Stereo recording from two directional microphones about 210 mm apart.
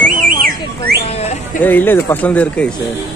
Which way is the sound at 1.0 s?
30° left (ahead or behind).